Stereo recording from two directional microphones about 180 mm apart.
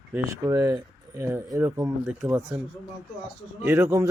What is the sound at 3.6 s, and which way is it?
Speech, 15° right (ahead or behind).